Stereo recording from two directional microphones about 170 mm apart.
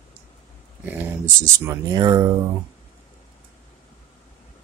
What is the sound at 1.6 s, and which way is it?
Speech, 20° right (ahead or behind).